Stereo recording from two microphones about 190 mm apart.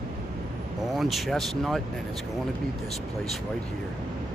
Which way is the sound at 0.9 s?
Centre (ahead or behind).